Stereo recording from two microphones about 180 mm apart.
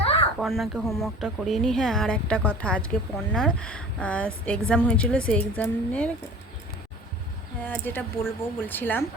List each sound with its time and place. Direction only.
0.0 s a sound: 30° left (ahead or behind)
0.3 s a woman's voice: centre (ahead or behind)
7.6 s a woman's voice: 10° left (ahead or behind)